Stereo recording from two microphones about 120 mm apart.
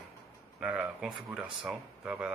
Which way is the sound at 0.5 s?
10° right (ahead or behind).